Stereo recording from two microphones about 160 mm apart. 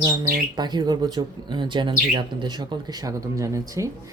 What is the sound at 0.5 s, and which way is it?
Speech, 25° right (ahead or behind).